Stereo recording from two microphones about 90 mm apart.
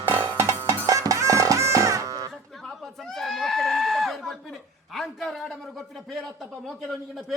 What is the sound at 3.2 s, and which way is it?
Goat, 5° left (ahead or behind).